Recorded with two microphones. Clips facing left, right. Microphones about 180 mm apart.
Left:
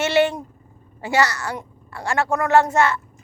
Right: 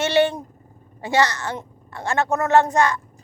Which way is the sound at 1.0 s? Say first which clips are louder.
Even; 20° right (ahead or behind).